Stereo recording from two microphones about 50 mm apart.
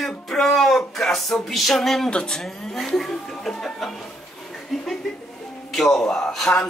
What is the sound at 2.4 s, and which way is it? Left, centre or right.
Speech, centre.